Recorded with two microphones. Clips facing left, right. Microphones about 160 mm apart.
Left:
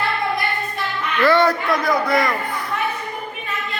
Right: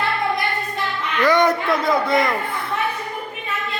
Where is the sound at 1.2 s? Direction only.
15° right (ahead or behind).